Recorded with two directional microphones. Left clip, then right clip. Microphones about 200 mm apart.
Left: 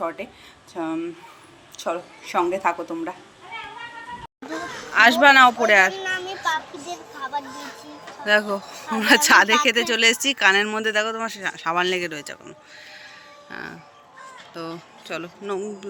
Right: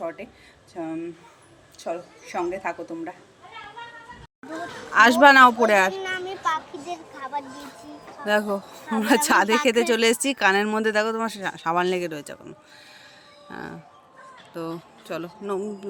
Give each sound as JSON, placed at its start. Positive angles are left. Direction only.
{"t": 0.0, "sound": "speech", "side_deg": -5}
{"t": 4.9, "sound": "a woman's voice", "side_deg": -50}
{"t": 6.9, "sound": "speech", "side_deg": -15}
{"t": 8.2, "sound": "speech", "side_deg": -30}
{"t": 9.7, "sound": "speech", "side_deg": -40}